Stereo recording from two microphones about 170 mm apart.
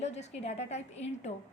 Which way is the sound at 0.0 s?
40° left (ahead or behind).